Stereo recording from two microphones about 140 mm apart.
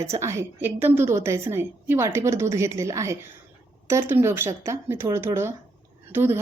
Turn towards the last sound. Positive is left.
turn(degrees=-15)  # may be behind; listen again after turning